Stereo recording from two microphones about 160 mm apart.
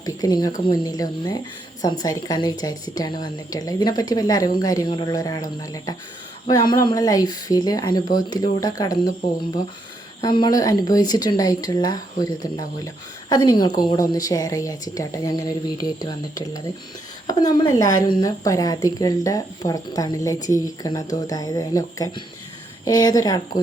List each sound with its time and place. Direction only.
0.0 s speech: 25° left (ahead or behind)
10.2 s speech: 25° left (ahead or behind)